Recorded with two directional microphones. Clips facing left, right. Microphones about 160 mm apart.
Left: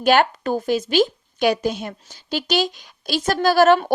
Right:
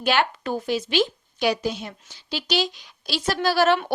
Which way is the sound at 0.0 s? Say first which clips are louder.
Left 6 dB; 45° left (ahead or behind).